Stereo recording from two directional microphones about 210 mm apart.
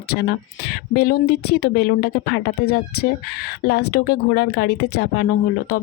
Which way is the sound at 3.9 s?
45° left (ahead or behind).